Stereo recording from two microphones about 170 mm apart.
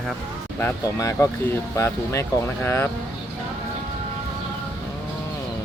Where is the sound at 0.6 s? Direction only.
15° left (ahead or behind).